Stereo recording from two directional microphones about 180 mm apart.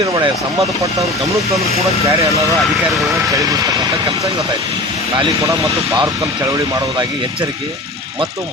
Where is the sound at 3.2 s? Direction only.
20° right (ahead or behind).